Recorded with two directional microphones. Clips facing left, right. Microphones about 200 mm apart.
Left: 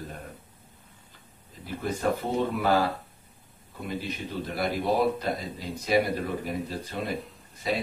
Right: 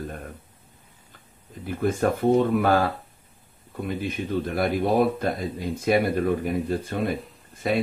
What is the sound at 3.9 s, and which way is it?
Speech, 50° right (ahead or behind).